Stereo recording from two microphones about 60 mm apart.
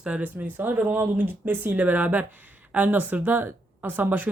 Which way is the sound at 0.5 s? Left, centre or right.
Right.